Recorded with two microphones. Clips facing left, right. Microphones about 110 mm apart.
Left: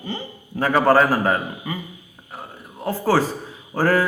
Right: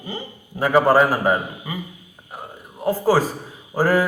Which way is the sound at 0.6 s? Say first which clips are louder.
Right 1 dB; 15° right (ahead or behind).